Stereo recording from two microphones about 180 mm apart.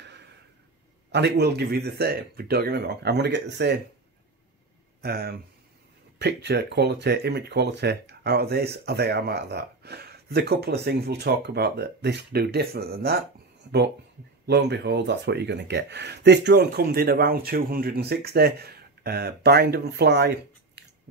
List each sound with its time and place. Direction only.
1.1 s speech: 65° right (ahead or behind)
5.0 s speech: 60° right (ahead or behind)
6.1 s speech: 70° right (ahead or behind)
14.4 s speech: 70° right (ahead or behind)